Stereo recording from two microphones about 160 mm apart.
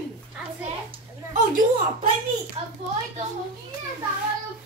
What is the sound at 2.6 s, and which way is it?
Speech, 40° right (ahead or behind).